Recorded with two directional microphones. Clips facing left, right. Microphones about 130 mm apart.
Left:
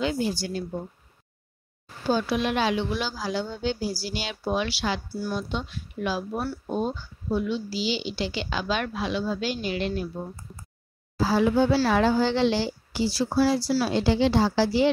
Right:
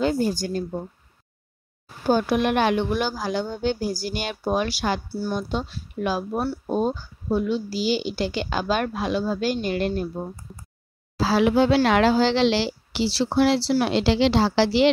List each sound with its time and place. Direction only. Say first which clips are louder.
0.0 s a woman's voice: right 4 dB; 45° right (ahead or behind)
2.0 s a woman's voice: right 4 dB; 50° right (ahead or behind)
5.0 s speech: right 3 dB; 30° right (ahead or behind)
5.3 s a woman's voice: right 4 dB; 40° right (ahead or behind)
11.1 s speech: right 2 dB; 90° right